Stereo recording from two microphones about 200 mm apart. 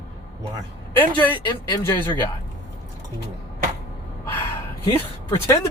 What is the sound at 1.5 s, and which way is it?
Speech, 20° left (ahead or behind).